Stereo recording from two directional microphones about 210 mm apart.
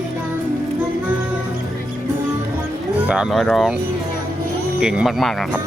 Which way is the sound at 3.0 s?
5° right (ahead or behind).